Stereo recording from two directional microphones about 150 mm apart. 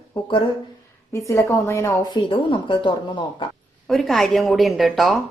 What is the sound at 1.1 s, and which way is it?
A woman's voice, 20° left (ahead or behind).